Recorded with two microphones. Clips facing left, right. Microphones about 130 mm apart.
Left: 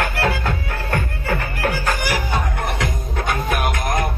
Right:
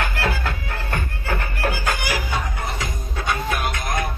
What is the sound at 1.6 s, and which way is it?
Music, 55° left (ahead or behind).